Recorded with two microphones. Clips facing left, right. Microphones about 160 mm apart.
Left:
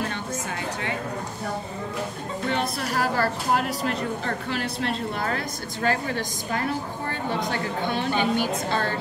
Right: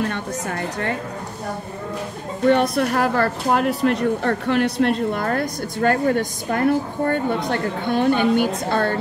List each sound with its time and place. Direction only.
0.1 s a woman's voice: 55° right (ahead or behind)
2.5 s speech: 55° right (ahead or behind)